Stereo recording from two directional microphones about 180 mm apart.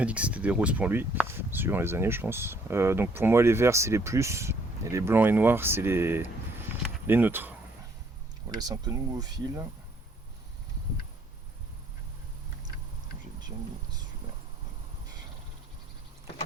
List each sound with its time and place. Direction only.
0.0 s speech: 5° right (ahead or behind)
8.4 s speech: 20° right (ahead or behind)